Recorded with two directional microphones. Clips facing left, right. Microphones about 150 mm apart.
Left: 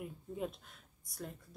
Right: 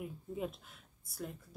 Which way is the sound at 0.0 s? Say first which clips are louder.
Right 1 dB; centre (ahead or behind).